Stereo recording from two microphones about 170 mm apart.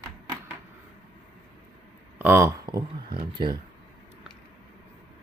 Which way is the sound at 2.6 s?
25° right (ahead or behind).